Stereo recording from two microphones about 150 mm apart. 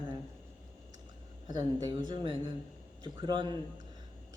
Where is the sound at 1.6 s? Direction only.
25° right (ahead or behind).